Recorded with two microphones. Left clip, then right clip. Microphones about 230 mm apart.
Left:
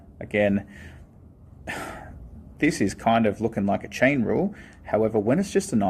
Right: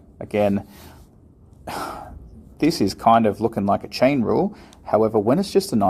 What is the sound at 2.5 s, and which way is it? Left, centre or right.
Speech, right.